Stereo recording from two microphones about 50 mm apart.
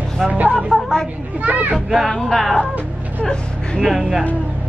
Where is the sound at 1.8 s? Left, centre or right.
Centre.